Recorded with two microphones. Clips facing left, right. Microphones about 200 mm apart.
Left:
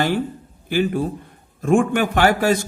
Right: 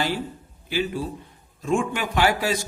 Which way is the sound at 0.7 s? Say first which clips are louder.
Left 6 dB; 50° left (ahead or behind).